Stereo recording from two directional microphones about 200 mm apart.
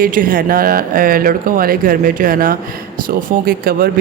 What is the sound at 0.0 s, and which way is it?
Speech, 45° right (ahead or behind).